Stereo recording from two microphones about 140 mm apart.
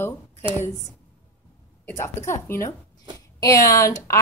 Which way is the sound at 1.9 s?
20° left (ahead or behind).